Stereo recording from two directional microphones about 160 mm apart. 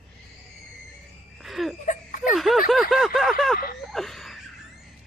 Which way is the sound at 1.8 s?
55° left (ahead or behind).